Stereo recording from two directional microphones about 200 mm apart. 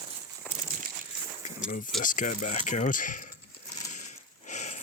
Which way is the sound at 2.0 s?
40° left (ahead or behind).